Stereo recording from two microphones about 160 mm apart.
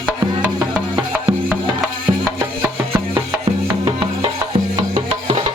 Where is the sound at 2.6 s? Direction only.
15° right (ahead or behind).